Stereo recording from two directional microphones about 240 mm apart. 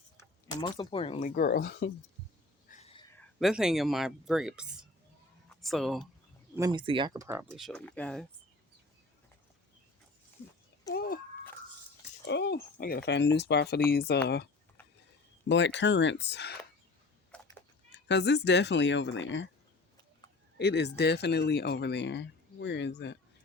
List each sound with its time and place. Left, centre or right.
0.2 s speech: centre
1.4 s speech: left
2.6 s whispering: left
3.2 s speech: centre
6.6 s speech: centre
10.9 s speech: left
12.2 s speech: left
14.8 s a sound: centre
15.4 s speech: left
17.3 s cat: centre
17.9 s speech: left
20.6 s speech: left